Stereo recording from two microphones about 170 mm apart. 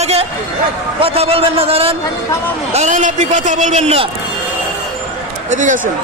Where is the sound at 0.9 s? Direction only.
35° right (ahead or behind).